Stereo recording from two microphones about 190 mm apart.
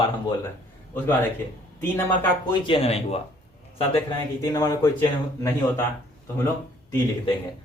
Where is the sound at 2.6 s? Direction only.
30° left (ahead or behind).